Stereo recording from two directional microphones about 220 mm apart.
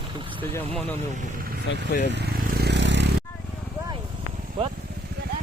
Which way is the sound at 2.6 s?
50° right (ahead or behind).